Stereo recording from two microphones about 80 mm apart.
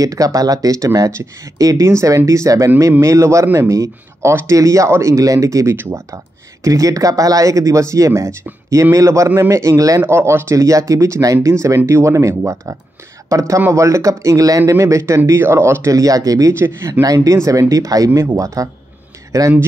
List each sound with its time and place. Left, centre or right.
0.0 s speech: right
5.8 s speech: right
6.0 s speech: right
10.0 s speech: right
16.5 s speech: right
17.0 s speech: right